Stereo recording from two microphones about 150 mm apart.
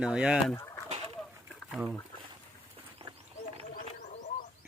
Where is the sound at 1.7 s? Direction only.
5° right (ahead or behind).